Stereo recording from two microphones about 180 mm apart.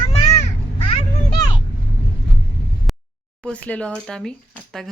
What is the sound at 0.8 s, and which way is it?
Speech, 30° left (ahead or behind).